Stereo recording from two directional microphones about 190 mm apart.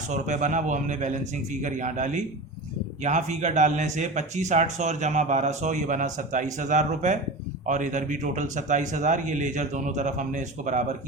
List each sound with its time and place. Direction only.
0.1 s speech: 40° right (ahead or behind)